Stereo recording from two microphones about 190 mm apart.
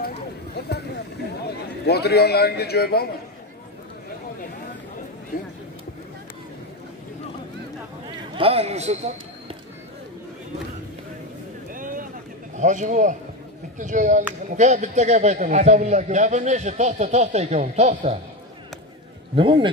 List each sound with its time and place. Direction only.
0.6 s a sound: 60° left (ahead or behind)
1.9 s a man's voice: 60° left (ahead or behind)
8.4 s a man's voice: 30° right (ahead or behind)
11.7 s vehicle: 45° right (ahead or behind)
12.5 s a man's voice: 40° right (ahead or behind)
19.3 s a man's voice: 25° right (ahead or behind)